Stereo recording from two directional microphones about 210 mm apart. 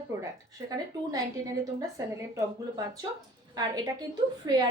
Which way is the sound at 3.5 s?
20° right (ahead or behind).